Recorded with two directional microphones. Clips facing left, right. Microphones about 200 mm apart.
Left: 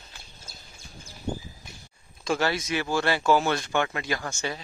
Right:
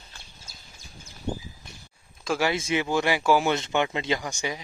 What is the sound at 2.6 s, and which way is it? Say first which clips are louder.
Speech: right 2 dB; 20° right (ahead or behind).